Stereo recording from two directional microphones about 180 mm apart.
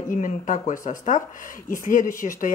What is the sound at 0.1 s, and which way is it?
A woman's voice, 45° left (ahead or behind).